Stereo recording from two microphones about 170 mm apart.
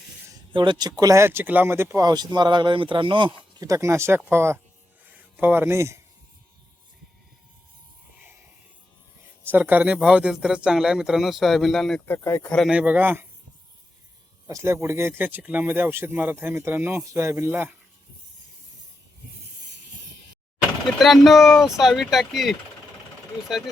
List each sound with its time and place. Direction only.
0.5 s speech: 30° right (ahead or behind)
9.5 s speech: 10° right (ahead or behind); by 12.5 s 15° left (ahead or behind)
12.5 s speech: 5° right (ahead or behind)
14.4 s speech: 20° right (ahead or behind)
20.8 s speech: centre (ahead or behind)